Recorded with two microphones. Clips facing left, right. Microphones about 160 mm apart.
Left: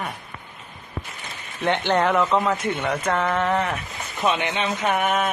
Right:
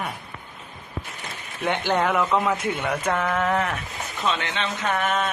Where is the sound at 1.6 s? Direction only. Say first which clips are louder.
Left 2 dB; 5° right (ahead or behind).